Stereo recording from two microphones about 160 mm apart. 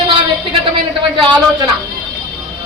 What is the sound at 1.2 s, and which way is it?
Speech, 30° right (ahead or behind).